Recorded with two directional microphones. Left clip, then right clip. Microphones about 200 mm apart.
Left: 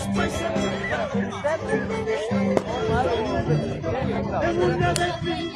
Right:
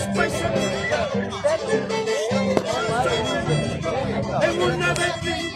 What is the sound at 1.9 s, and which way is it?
Music, 30° right (ahead or behind).